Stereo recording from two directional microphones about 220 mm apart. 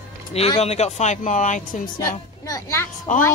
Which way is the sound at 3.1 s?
35° left (ahead or behind).